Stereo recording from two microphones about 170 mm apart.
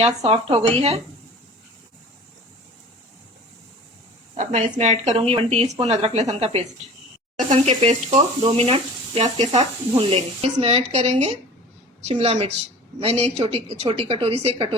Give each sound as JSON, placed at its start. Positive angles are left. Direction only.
{"t": 0.0, "sound": "speech", "side_deg": -35}
{"t": 4.4, "sound": "speech", "side_deg": -45}